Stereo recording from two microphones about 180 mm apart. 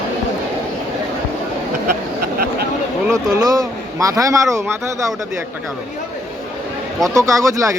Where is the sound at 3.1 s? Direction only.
20° right (ahead or behind).